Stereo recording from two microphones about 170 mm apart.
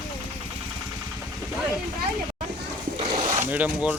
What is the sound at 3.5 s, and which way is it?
Speech, 10° right (ahead or behind).